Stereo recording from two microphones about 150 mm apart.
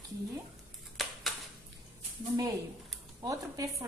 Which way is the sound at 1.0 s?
Centre (ahead or behind).